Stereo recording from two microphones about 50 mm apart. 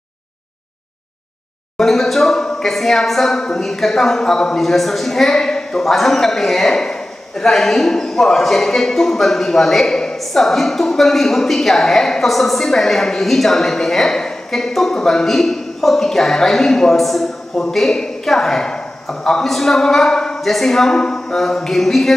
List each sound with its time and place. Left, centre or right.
1.8 s a woman's voice: centre
4.6 s a woman's voice: centre